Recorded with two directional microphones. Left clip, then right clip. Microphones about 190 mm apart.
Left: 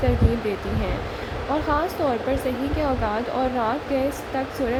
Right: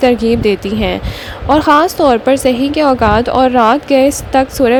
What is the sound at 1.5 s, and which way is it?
Speech, 55° right (ahead or behind).